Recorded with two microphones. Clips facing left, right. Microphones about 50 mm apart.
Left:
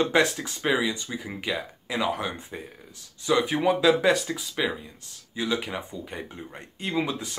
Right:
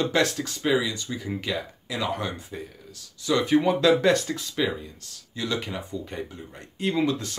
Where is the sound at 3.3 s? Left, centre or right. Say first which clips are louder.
Right 1 dB; centre.